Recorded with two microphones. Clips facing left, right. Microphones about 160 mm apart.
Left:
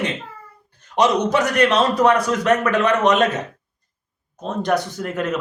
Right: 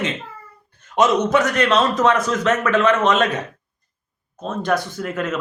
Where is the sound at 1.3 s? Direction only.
15° left (ahead or behind).